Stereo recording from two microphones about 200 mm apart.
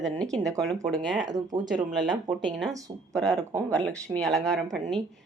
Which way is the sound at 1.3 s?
20° right (ahead or behind).